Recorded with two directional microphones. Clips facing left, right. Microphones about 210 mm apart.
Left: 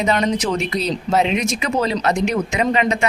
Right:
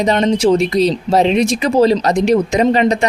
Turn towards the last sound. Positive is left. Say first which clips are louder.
# right 5 dB
turn(degrees=-35)  # may be behind; listen again after turning